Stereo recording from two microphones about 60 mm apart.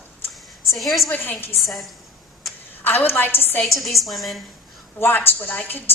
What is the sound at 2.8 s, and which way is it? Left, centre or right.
Speech, left.